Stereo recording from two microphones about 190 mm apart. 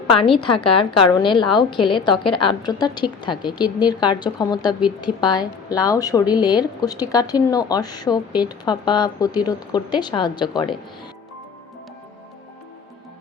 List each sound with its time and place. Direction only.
0.2 s a woman's voice: 25° left (ahead or behind)